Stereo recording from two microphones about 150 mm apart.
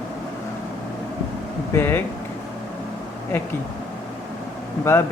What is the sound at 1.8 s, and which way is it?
Speech, 15° left (ahead or behind).